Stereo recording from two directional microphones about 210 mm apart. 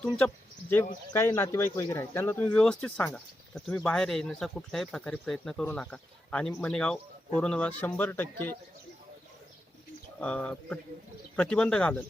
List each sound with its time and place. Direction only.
1.1 s speech: 10° left (ahead or behind)
10.2 s speech: 5° left (ahead or behind)